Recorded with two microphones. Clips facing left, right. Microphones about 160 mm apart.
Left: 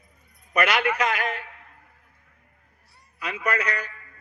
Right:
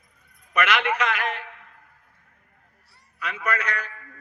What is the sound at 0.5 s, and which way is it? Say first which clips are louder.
A man's voice: left 1 dB; 40° left (ahead or behind).